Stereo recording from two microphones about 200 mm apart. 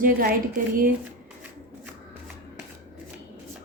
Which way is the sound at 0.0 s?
45° right (ahead or behind).